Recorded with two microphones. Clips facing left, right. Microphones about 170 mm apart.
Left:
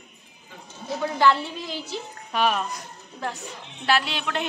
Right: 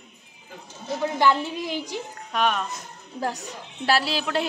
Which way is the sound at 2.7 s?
35° right (ahead or behind).